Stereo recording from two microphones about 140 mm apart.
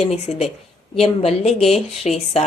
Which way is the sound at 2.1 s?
55° left (ahead or behind).